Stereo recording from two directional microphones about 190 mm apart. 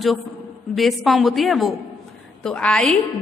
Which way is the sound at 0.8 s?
Centre (ahead or behind).